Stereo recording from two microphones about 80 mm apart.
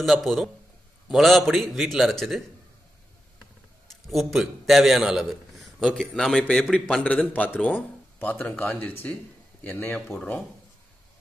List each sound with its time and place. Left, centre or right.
0.0 s speech: centre
4.1 s a man's voice: centre; by 9.9 s left